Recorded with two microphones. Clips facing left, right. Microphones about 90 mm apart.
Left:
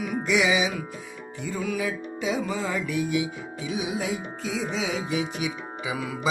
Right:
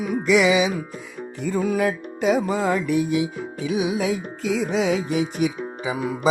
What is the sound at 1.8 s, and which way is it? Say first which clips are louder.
Music: right 7 dB; 55° right (ahead or behind).